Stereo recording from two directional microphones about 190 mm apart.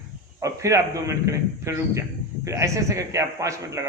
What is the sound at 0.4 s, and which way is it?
A man's voice, 15° right (ahead or behind).